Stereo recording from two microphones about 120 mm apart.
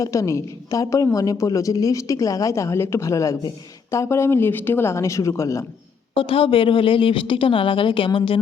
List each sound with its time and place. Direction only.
0.0 s a woman's voice: 25° left (ahead or behind)
6.1 s speech: 50° left (ahead or behind)